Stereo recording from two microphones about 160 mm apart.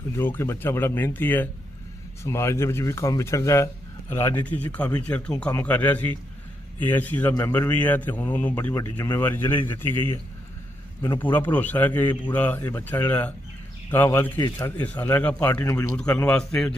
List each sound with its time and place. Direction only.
0.2 s a man's voice: 15° left (ahead or behind)
11.2 s a man's voice: 10° left (ahead or behind)